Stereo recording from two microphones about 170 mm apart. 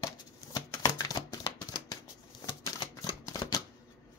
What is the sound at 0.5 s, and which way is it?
Typewriter, 20° left (ahead or behind).